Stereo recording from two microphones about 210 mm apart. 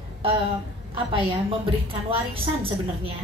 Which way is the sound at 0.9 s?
25° right (ahead or behind).